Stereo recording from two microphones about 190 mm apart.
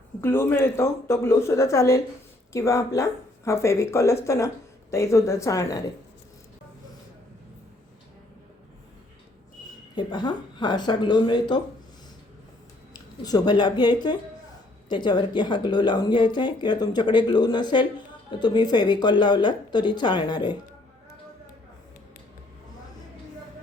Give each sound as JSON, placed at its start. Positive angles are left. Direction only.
{"t": 0.2, "sound": "speech", "side_deg": 10}
{"t": 9.9, "sound": "speech", "side_deg": 25}
{"t": 12.9, "sound": "speech", "side_deg": 20}